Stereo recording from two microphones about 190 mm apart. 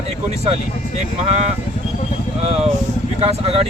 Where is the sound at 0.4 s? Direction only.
35° right (ahead or behind).